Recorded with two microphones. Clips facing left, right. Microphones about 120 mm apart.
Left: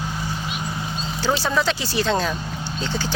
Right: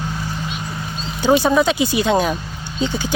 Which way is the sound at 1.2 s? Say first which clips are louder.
Right 7 dB; 15° right (ahead or behind).